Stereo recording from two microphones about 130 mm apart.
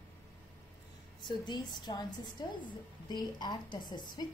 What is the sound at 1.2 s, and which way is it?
A woman's voice, 35° left (ahead or behind).